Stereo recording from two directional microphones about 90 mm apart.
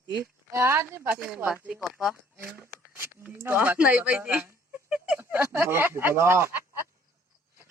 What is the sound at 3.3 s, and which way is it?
Speech, 25° right (ahead or behind).